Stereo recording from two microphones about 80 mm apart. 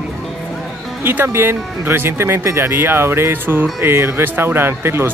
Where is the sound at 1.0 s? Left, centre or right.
Right.